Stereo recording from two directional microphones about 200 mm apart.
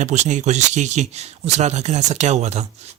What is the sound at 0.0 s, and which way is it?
Speech, 35° right (ahead or behind).